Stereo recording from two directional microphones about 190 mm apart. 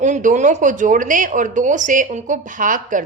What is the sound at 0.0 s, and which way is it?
A woman's voice, 40° right (ahead or behind).